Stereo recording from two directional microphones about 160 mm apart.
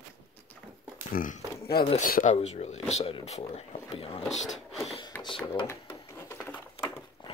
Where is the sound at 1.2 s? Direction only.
70° left (ahead or behind).